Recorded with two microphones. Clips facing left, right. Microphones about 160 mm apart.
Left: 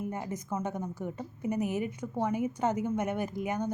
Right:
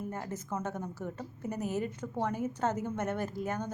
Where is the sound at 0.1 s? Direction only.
15° left (ahead or behind).